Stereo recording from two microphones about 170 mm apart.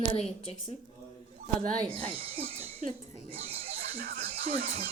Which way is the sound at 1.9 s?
35° right (ahead or behind).